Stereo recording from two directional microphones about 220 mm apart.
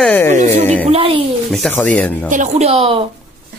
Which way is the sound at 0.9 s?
25° right (ahead or behind).